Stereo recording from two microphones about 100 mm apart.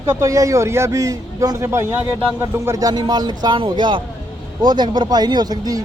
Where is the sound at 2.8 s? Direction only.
40° right (ahead or behind).